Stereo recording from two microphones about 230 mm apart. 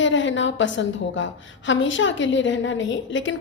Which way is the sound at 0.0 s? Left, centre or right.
Left.